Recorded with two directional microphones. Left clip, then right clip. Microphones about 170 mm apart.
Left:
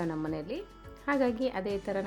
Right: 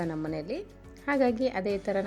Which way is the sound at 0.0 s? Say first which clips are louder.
Right 1 dB; 5° right (ahead or behind).